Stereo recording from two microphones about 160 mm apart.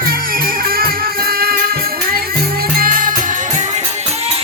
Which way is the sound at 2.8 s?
60° right (ahead or behind).